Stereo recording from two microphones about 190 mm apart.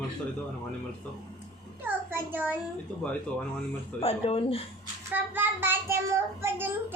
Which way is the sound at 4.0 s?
30° left (ahead or behind).